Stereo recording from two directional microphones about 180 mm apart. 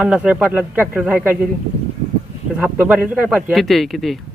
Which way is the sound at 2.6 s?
5° right (ahead or behind).